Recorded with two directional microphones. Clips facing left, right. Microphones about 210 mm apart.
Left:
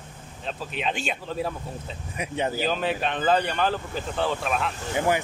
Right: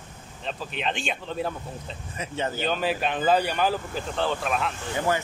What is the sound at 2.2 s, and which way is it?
Speech, 15° left (ahead or behind).